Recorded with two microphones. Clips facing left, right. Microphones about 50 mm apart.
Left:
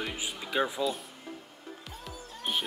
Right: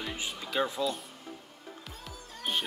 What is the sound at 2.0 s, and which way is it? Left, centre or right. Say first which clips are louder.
Music: even; centre.